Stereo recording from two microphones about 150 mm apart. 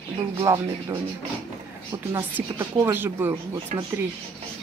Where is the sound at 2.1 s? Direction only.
20° right (ahead or behind).